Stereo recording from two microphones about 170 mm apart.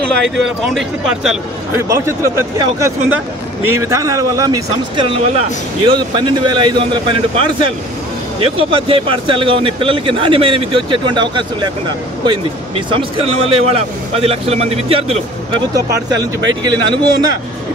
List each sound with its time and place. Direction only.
0.1 s speech: centre (ahead or behind)
1.8 s speech: 15° right (ahead or behind)
12.3 s speech: 30° right (ahead or behind)
15.7 s speech: 20° right (ahead or behind)